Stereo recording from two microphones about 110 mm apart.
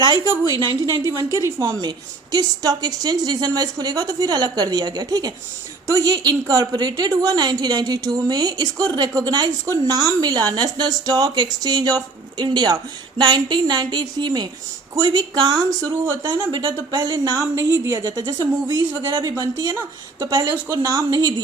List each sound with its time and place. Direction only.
0.0 s a woman's voice: 45° right (ahead or behind)